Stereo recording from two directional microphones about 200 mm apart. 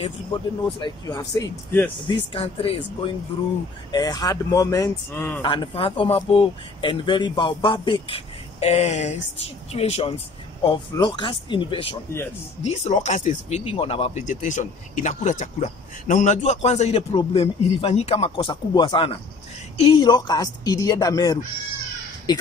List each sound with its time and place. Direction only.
0.7 s speech: 20° left (ahead or behind)
2.0 s speech: 30° left (ahead or behind); by 5.4 s 10° left (ahead or behind)
5.4 s speech: 25° left (ahead or behind)